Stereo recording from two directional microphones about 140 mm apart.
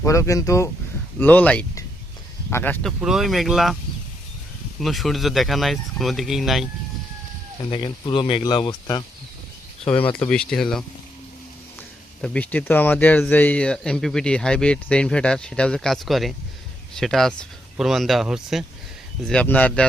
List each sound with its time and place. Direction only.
0.0 s speech: 20° left (ahead or behind)
1.2 s speech: 10° left (ahead or behind)
2.8 s speech: centre (ahead or behind)
4.8 s speech: centre (ahead or behind)
7.6 s speech: 35° left (ahead or behind)
9.8 s speech: 10° left (ahead or behind)
19.3 s speech: 10° left (ahead or behind)